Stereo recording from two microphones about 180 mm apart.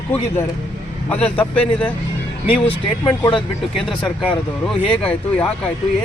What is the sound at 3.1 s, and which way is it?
Speech, 25° left (ahead or behind).